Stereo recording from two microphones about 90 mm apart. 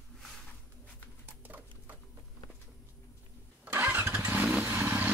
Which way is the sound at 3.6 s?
25° right (ahead or behind).